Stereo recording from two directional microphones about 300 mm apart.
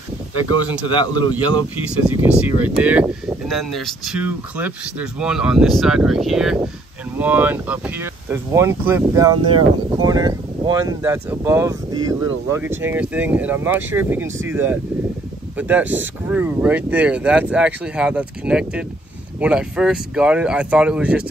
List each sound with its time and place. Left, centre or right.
0.3 s speech: right
0.8 s a man's voice: centre
2.0 s speech: centre